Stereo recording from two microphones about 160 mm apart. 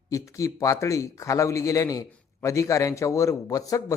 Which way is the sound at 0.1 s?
20° left (ahead or behind).